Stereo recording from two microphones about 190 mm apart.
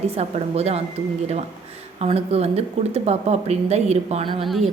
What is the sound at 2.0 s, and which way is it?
A woman's voice, 30° right (ahead or behind).